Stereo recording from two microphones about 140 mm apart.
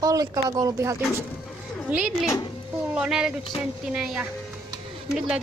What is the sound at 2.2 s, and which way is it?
Speech, 25° left (ahead or behind).